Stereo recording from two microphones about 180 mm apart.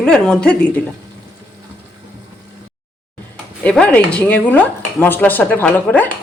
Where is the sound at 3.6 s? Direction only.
5° left (ahead or behind).